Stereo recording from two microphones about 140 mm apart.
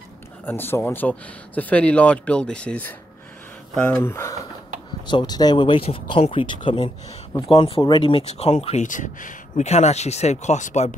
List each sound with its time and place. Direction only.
0.5 s speech: 15° left (ahead or behind)
5.0 s speech: 30° left (ahead or behind); by 8.8 s 45° left (ahead or behind)
8.8 s speech: 65° left (ahead or behind)